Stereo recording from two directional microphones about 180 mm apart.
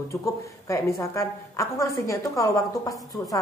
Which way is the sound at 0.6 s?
15° left (ahead or behind).